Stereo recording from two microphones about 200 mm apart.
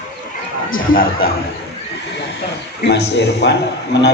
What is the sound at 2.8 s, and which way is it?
A man's voice, 55° left (ahead or behind).